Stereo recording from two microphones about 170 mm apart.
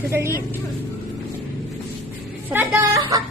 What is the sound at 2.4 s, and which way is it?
Speech, 10° right (ahead or behind).